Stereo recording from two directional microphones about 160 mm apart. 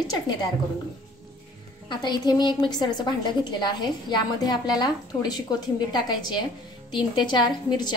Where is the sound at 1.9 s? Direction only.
25° left (ahead or behind).